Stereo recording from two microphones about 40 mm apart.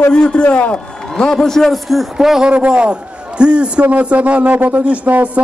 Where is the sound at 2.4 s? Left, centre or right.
Right.